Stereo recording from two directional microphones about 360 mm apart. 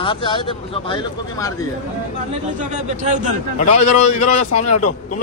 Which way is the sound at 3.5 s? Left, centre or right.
Centre.